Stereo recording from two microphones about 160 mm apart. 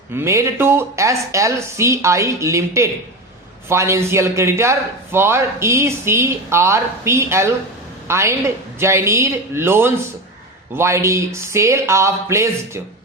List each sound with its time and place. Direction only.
0.1 s a man's voice: 15° right (ahead or behind)